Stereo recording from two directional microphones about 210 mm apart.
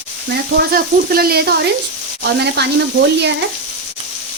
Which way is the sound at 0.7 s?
45° right (ahead or behind).